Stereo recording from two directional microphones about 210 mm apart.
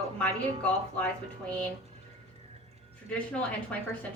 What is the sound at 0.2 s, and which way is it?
A woman's voice, 5° left (ahead or behind).